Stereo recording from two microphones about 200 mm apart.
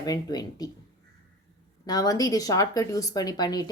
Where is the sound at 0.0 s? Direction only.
20° left (ahead or behind).